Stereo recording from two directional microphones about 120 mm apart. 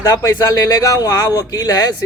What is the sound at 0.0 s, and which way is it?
Speech, 25° left (ahead or behind).